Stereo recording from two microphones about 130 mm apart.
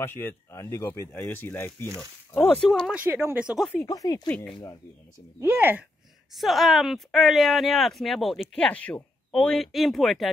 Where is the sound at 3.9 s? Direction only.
30° left (ahead or behind).